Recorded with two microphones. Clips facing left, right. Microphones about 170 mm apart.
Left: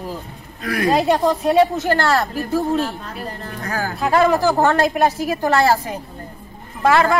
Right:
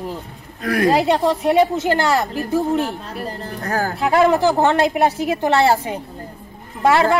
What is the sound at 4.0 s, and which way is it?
A woman's voice, 20° right (ahead or behind).